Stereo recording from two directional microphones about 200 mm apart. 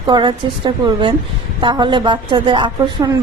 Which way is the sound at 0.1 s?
20° right (ahead or behind).